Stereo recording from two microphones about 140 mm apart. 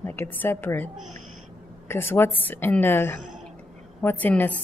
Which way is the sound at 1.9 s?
15° left (ahead or behind).